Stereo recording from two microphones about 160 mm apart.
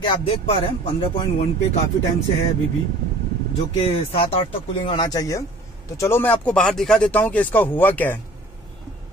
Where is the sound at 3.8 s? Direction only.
35° left (ahead or behind).